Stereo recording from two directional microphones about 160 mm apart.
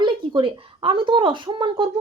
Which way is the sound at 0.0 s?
30° right (ahead or behind).